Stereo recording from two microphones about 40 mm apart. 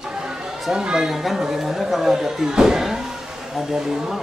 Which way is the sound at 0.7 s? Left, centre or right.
Centre.